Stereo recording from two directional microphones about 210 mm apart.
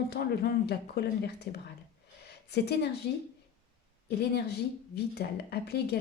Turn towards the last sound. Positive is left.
turn(degrees=50)  # may be behind; listen again after turning